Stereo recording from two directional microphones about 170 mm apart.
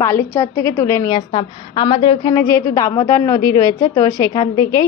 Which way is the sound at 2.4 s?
20° left (ahead or behind).